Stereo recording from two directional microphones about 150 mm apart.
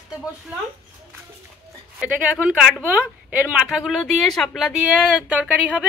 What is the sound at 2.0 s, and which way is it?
A woman's voice, 5° right (ahead or behind).